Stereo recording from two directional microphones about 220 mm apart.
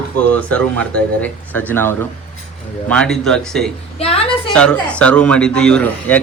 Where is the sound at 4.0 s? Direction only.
25° left (ahead or behind).